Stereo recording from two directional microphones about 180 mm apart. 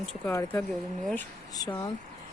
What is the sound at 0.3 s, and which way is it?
Speech, 15° left (ahead or behind).